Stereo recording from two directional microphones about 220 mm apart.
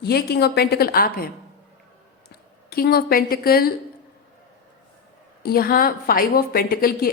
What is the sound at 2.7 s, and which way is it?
A woman's voice, 45° left (ahead or behind).